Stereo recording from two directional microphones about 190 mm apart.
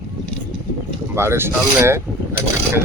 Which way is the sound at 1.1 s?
15° right (ahead or behind).